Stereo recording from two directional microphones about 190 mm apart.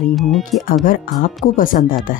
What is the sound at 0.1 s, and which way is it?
Speech, centre (ahead or behind).